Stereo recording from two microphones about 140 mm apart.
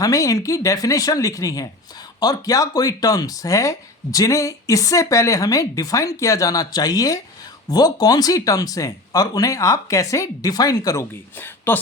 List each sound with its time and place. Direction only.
0.0 s speech: 25° left (ahead or behind)